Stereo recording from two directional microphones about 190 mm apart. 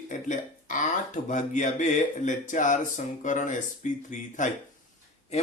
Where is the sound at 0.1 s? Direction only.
40° left (ahead or behind).